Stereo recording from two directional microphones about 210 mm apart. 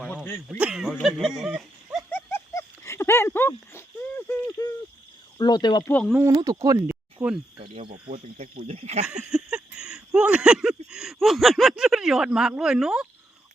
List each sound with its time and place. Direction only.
0.0 s dog: 5° left (ahead or behind)
0.6 s speech: centre (ahead or behind)
2.0 s a sound: 10° left (ahead or behind)
5.4 s speech: 20° left (ahead or behind)
5.9 s speech: 5° left (ahead or behind)
6.1 s speech: 15° right (ahead or behind)
7.5 s speech: 25° right (ahead or behind)
8.1 s speech: 35° right (ahead or behind)
9.2 s speech: 5° right (ahead or behind)